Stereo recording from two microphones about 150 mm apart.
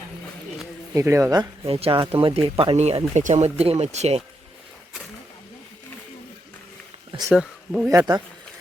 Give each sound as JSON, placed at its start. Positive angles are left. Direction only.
{"t": 0.9, "sound": "speech", "side_deg": -15}
{"t": 1.6, "sound": "speech", "side_deg": -35}
{"t": 7.3, "sound": "speech", "side_deg": -5}
{"t": 7.9, "sound": "speech", "side_deg": -25}